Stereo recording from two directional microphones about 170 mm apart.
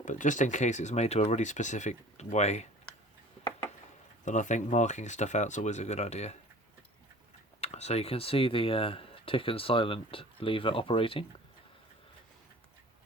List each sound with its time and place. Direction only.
0.0 s speech: 50° left (ahead or behind)
2.9 s a sound: 5° left (ahead or behind)
4.3 s speech: 45° left (ahead or behind)
7.6 s speech: 40° left (ahead or behind)